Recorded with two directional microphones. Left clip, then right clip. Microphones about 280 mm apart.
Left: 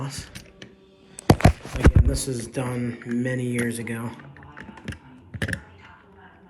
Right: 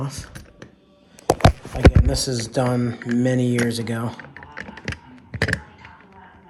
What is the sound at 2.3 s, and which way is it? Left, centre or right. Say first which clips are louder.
Speech: right 7 dB; centre.